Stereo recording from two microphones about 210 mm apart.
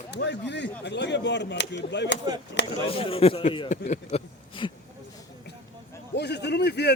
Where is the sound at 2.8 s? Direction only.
25° left (ahead or behind).